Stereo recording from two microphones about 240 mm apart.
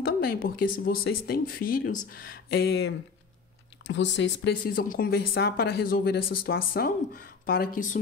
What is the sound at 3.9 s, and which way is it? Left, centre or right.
Speech, left.